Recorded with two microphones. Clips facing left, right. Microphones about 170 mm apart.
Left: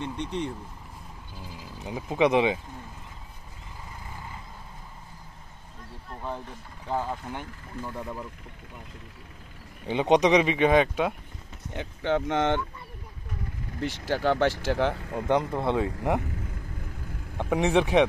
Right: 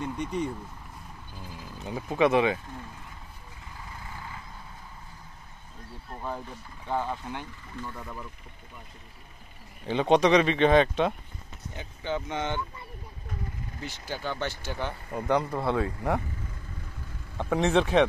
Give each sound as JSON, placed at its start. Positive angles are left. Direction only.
{"t": 0.0, "sound": "speech", "side_deg": -5}
{"t": 1.8, "sound": "speech", "side_deg": 15}
{"t": 6.9, "sound": "speech", "side_deg": 5}
{"t": 9.8, "sound": "speech", "side_deg": 15}
{"t": 11.7, "sound": "speech", "side_deg": 75}
{"t": 13.7, "sound": "speech", "side_deg": 75}
{"t": 15.1, "sound": "speech", "side_deg": 20}
{"t": 17.4, "sound": "speech", "side_deg": 15}